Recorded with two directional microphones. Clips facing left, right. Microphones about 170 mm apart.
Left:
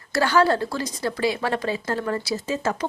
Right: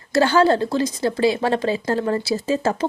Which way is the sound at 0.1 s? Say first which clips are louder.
Right 4 dB; 25° right (ahead or behind).